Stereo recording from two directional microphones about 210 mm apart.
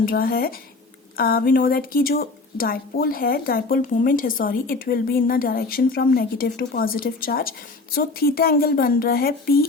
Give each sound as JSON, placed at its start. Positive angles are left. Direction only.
{"t": 0.0, "sound": "speech", "side_deg": 45}